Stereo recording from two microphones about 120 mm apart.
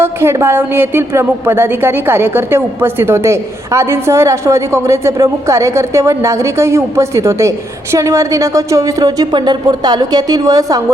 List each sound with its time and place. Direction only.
0.0 s a woman's voice: 20° right (ahead or behind)